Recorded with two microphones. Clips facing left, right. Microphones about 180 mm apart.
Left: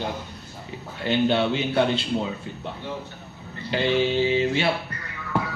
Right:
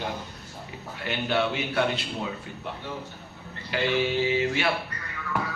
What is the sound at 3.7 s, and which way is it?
A man's voice, 30° left (ahead or behind).